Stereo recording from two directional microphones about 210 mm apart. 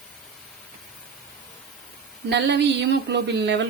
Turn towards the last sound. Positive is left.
turn(degrees=-55)  # may be behind; listen again after turning